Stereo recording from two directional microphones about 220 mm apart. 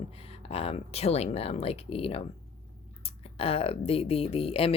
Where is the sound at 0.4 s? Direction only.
25° left (ahead or behind).